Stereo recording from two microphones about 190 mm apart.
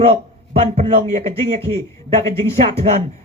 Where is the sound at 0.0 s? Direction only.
30° right (ahead or behind).